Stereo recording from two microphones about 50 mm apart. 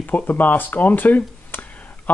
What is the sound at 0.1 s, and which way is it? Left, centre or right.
Speech, left.